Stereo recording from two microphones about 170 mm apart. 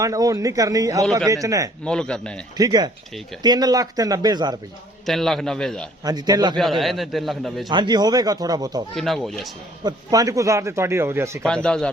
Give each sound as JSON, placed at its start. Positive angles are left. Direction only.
{"t": 0.0, "sound": "speech", "side_deg": -20}
{"t": 1.8, "sound": "a man's voice", "side_deg": 5}
{"t": 2.6, "sound": "speech", "side_deg": -25}
{"t": 5.0, "sound": "a man's voice", "side_deg": 0}
{"t": 6.1, "sound": "speech", "side_deg": -20}
{"t": 6.6, "sound": "a man's voice", "side_deg": 0}
{"t": 7.7, "sound": "speech", "side_deg": -25}
{"t": 9.0, "sound": "a man's voice", "side_deg": 0}
{"t": 9.8, "sound": "a man's voice", "side_deg": -20}
{"t": 11.4, "sound": "a man's voice", "side_deg": 5}